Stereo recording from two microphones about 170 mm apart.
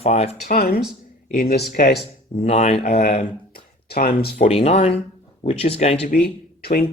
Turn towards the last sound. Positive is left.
turn(degrees=65)  # may be behind; listen again after turning